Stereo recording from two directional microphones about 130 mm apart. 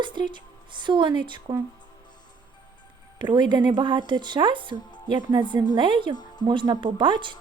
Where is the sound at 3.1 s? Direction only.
35° right (ahead or behind).